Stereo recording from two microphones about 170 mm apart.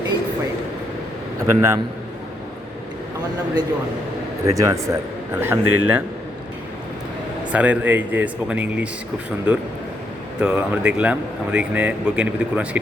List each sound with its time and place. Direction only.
1.5 s a man's voice: 15° right (ahead or behind)
4.4 s a man's voice: 20° right (ahead or behind)
7.5 s a man's voice: 10° right (ahead or behind)